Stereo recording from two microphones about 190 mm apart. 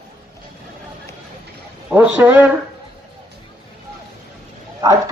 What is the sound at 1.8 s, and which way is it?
Speech, 10° right (ahead or behind).